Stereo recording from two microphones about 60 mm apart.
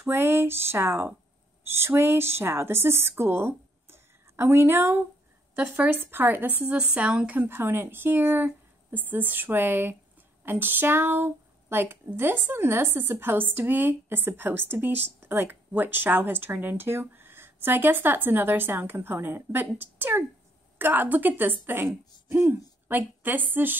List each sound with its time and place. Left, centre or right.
0.0 s speech: right
5.6 s a woman's voice: right
7.3 s a woman's voice: right